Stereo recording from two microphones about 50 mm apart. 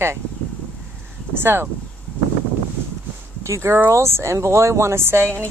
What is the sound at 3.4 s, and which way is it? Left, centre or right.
Speech, right.